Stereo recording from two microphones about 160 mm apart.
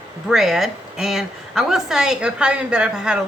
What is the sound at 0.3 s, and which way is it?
A woman's voice, 5° right (ahead or behind).